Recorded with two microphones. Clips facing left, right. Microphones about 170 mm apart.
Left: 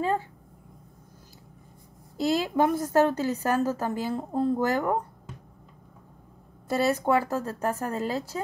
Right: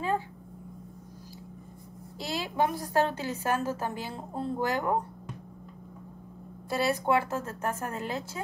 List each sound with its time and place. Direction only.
2.1 s a woman's voice: 45° left (ahead or behind)
6.7 s a woman's voice: 40° left (ahead or behind)